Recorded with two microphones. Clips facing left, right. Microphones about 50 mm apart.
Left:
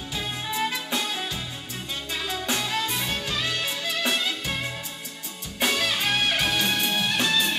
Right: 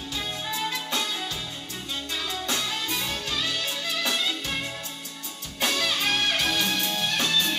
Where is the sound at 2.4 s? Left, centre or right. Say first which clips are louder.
Left 5 dB; left.